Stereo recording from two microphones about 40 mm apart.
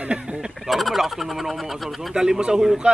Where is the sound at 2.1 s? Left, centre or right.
Centre.